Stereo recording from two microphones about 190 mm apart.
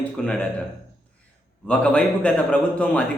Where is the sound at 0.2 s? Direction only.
5° left (ahead or behind).